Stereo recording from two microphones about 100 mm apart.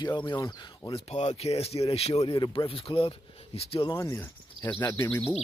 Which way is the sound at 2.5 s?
60° left (ahead or behind).